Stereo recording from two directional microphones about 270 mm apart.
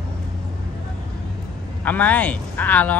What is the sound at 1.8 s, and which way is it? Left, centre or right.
Speech, centre.